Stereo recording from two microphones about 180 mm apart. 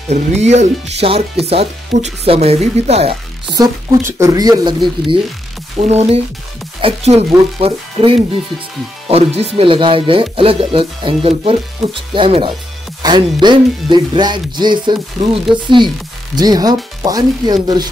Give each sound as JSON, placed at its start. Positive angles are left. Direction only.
{"t": 0.1, "sound": "speech", "side_deg": -40}
{"t": 5.8, "sound": "speech", "side_deg": -35}